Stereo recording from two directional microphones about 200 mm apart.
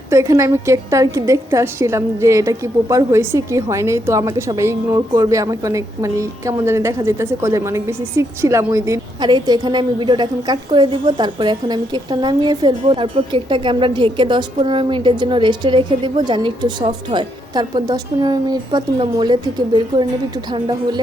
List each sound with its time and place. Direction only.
0.1 s a woman's voice: 15° right (ahead or behind)